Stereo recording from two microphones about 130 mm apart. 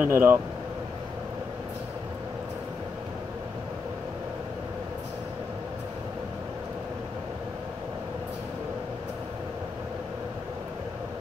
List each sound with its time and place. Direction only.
0.0 s speech: 20° right (ahead or behind)